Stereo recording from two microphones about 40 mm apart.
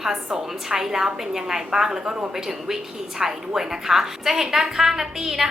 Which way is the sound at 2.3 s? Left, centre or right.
Centre.